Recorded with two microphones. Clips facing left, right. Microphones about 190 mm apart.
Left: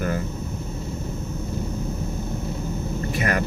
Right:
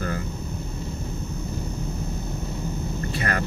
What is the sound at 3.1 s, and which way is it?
Vehicle, 20° left (ahead or behind).